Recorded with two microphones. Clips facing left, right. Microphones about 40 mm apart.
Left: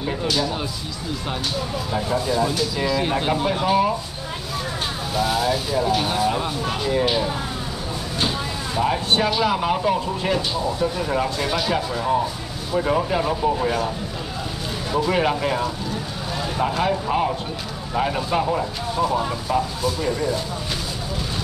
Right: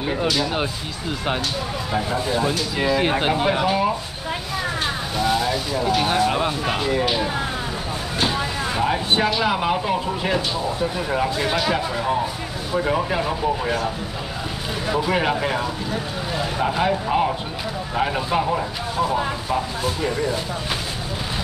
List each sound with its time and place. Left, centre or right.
0.0 s speech: right
2.1 s speech: right
3.6 s speech: centre
5.1 s speech: centre
6.3 s speech: right
6.9 s speech: centre
8.7 s speech: centre
12.7 s speech: centre
15.0 s speech: centre
20.0 s speech: centre